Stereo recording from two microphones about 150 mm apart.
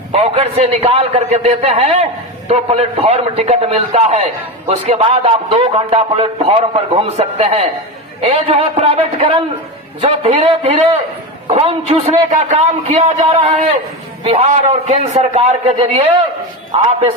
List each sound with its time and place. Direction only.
0.1 s a man's voice: 45° right (ahead or behind)